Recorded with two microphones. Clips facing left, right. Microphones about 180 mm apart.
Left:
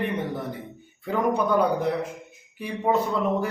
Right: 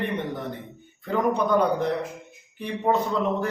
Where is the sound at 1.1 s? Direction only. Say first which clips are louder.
Even; 5° left (ahead or behind).